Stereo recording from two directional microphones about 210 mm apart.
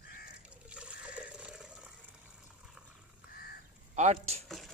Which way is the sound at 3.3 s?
45° left (ahead or behind).